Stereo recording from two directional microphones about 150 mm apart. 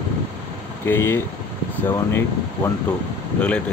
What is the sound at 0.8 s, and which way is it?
Speech, 15° left (ahead or behind).